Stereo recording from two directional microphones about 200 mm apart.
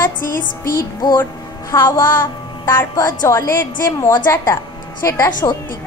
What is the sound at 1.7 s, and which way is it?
Music, 20° left (ahead or behind).